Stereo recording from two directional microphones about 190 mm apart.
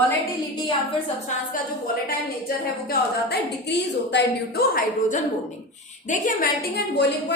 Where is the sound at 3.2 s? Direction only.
60° left (ahead or behind); by 6.5 s 45° left (ahead or behind).